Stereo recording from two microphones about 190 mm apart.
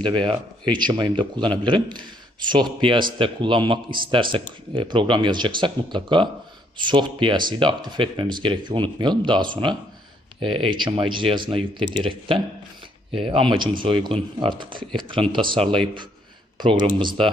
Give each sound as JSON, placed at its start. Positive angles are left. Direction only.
{"t": 0.0, "sound": "speech", "side_deg": -25}
{"t": 17.0, "sound": "speech", "side_deg": -25}